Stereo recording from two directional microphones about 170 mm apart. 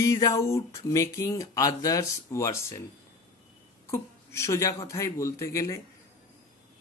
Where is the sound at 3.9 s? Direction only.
15° left (ahead or behind).